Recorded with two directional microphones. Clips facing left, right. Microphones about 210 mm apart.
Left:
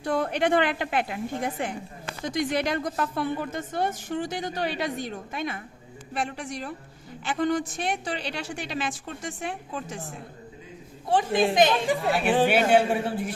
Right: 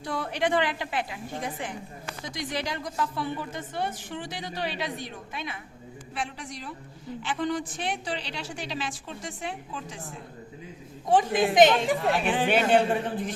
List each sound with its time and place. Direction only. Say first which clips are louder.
0.0 s a woman's voice: left 4 dB; 55° left (ahead or behind)
11.5 s speech: right 5 dB; 20° right (ahead or behind)
11.9 s a man's voice: left 2 dB; 5° left (ahead or behind)